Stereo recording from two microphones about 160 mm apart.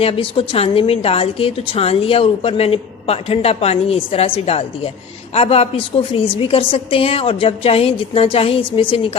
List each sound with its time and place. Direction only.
0.0 s a woman's voice: 35° left (ahead or behind)